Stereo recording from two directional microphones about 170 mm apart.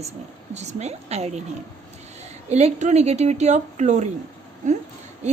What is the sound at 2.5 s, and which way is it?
A woman's voice, 40° right (ahead or behind).